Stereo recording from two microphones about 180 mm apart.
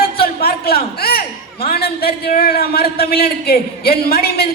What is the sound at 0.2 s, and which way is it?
A man's voice, 55° left (ahead or behind).